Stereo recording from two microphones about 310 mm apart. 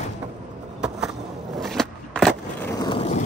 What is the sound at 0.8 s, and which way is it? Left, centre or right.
Skateboard, centre.